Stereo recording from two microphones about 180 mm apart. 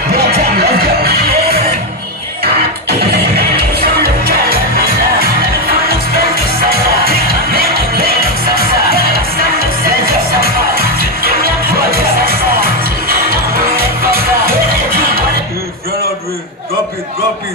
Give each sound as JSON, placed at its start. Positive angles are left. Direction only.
{"t": 0.6, "sound": "music", "side_deg": -60}
{"t": 2.9, "sound": "music", "side_deg": -65}